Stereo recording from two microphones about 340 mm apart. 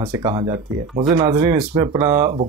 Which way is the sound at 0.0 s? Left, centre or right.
Centre.